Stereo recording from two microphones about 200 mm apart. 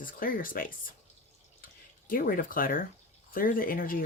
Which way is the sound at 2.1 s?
45° left (ahead or behind).